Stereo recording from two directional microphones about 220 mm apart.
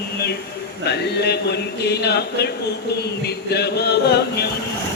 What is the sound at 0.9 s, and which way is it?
Chant, 50° left (ahead or behind).